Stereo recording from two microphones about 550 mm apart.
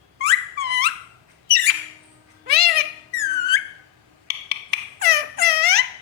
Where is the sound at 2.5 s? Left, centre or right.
Centre.